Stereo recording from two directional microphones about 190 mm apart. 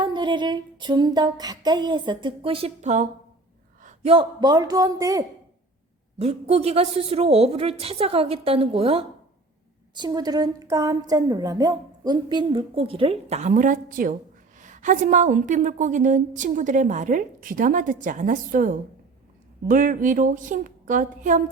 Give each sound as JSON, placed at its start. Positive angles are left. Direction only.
{"t": 0.0, "sound": "a woman's voice", "side_deg": -25}
{"t": 6.1, "sound": "a woman's voice", "side_deg": -35}